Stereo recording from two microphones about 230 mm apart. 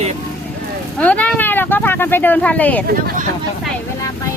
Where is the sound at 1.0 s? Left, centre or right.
Centre.